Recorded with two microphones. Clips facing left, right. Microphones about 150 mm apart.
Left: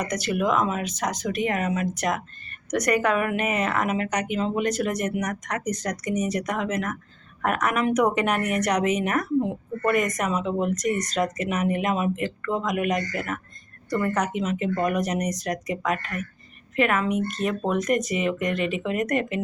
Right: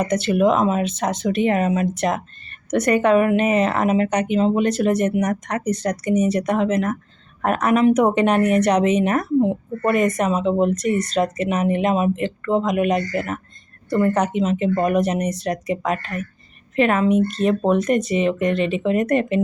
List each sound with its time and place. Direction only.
0.0 s a woman's voice: 25° right (ahead or behind)